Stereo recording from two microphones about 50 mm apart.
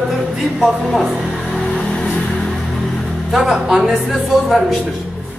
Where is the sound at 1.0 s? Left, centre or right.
Centre.